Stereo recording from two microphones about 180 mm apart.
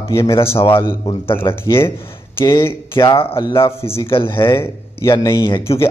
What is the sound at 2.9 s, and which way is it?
Speech, 30° left (ahead or behind).